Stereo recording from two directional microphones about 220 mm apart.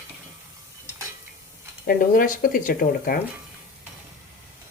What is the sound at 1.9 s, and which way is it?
Speech, 40° left (ahead or behind).